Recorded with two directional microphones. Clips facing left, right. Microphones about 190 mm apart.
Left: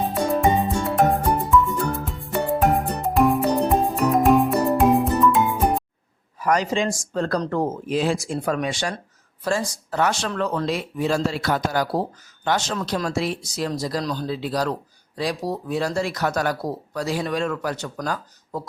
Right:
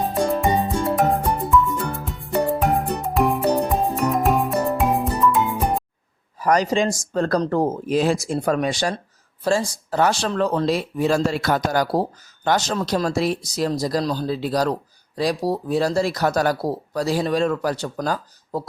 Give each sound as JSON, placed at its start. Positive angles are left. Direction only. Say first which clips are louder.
{"t": 0.0, "sound": "music", "louder": "even", "side_deg": 0}
{"t": 6.4, "sound": "speech", "louder": "right 3 dB", "side_deg": -35}